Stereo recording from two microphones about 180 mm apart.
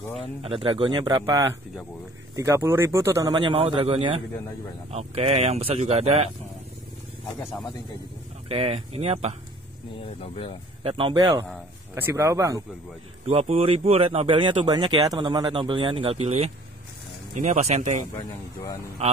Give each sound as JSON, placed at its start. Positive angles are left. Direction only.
{"t": 0.4, "sound": "speech", "side_deg": -30}
{"t": 8.5, "sound": "speech", "side_deg": -35}
{"t": 10.2, "sound": "speech", "side_deg": 30}
{"t": 10.8, "sound": "speech", "side_deg": -30}
{"t": 13.3, "sound": "speech", "side_deg": -35}